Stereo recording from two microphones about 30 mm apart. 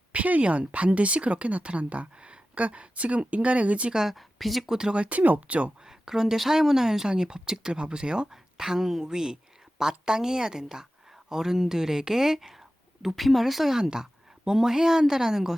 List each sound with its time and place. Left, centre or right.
0.1 s speech: right
4.1 s a woman's voice: centre
4.6 s speech: centre
4.9 s speech: right
5.2 s speech: right
5.8 s a woman's voice: centre